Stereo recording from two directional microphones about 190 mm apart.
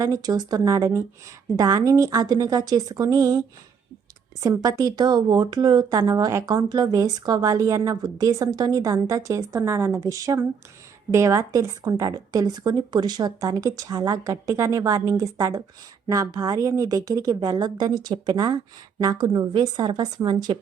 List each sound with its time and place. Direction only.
0.0 s a woman's voice: 20° right (ahead or behind)